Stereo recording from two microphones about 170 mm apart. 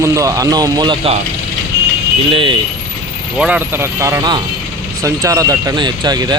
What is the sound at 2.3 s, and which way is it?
Speech, 30° right (ahead or behind).